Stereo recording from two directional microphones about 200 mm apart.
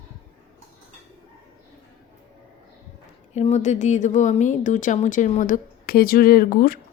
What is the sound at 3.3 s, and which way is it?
Speech, 35° left (ahead or behind).